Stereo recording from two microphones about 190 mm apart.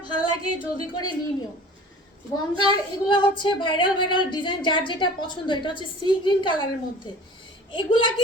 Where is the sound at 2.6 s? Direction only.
25° left (ahead or behind).